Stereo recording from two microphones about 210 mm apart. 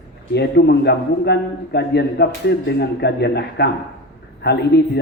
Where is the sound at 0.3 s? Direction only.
50° left (ahead or behind).